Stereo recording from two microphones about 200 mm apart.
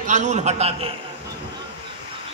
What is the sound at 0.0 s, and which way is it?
Speech, 35° right (ahead or behind).